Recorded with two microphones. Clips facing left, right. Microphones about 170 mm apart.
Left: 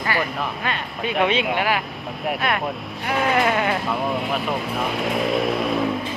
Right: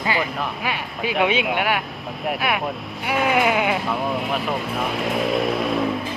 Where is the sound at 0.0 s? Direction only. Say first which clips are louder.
Right 1 dB; 15° right (ahead or behind).